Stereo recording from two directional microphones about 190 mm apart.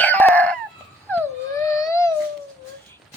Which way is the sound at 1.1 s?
15° left (ahead or behind).